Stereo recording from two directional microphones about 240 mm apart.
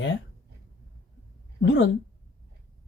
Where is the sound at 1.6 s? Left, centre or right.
Left.